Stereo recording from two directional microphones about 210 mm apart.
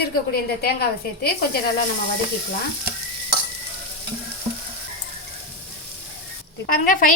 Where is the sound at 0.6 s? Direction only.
45° left (ahead or behind).